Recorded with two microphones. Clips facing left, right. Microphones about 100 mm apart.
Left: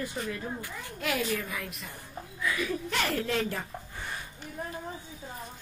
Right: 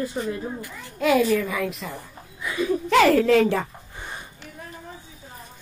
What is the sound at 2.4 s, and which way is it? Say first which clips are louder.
Speech: right 7 dB; 25° right (ahead or behind).